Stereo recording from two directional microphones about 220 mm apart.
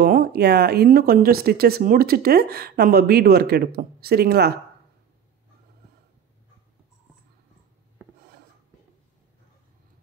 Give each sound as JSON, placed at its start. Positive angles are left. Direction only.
{"t": 0.0, "sound": "speech", "side_deg": -40}